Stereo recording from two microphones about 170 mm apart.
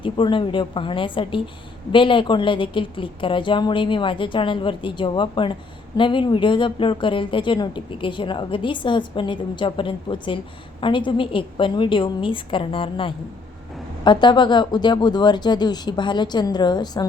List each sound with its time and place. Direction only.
0.0 s a woman's voice: 30° left (ahead or behind)